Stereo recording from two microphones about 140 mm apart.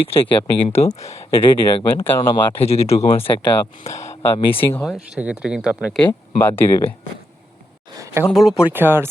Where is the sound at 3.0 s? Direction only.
40° left (ahead or behind).